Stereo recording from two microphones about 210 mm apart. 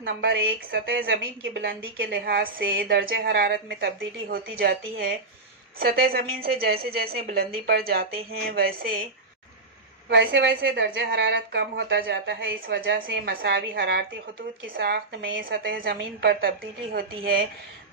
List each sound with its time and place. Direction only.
0.0 s a woman's voice: 50° right (ahead or behind)
1.2 s a woman's voice: 60° right (ahead or behind)
5.8 s a woman's voice: 45° right (ahead or behind)
10.1 s a woman's voice: 60° right (ahead or behind)